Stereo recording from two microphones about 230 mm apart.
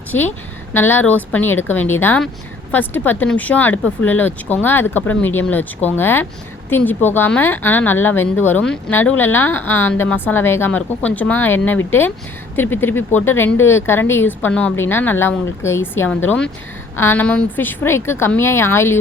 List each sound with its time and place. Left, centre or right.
0.1 s speech: centre